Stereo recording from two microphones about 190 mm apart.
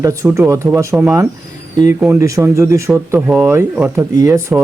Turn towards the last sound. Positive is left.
turn(degrees=-15)  # may be behind; listen again after turning